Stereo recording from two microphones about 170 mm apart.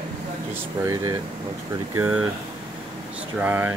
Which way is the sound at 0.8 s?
15° right (ahead or behind).